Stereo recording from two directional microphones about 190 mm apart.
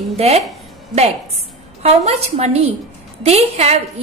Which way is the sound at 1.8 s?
35° right (ahead or behind).